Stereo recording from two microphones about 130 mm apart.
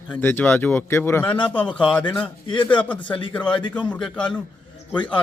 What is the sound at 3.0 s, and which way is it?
Speech, 40° left (ahead or behind).